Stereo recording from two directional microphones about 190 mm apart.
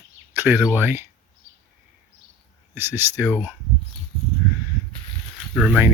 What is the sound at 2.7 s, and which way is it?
Speech, 10° right (ahead or behind).